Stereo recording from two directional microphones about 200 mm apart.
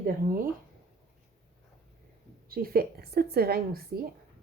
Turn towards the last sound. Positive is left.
turn(degrees=-50)  # may be behind; listen again after turning